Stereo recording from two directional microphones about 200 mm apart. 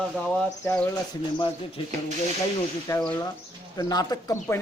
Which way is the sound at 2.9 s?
15° left (ahead or behind).